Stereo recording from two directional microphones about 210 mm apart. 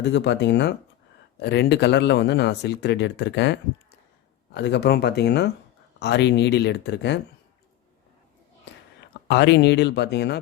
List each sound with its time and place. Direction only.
0.0 s speech: 55° left (ahead or behind)
9.2 s speech: 55° left (ahead or behind)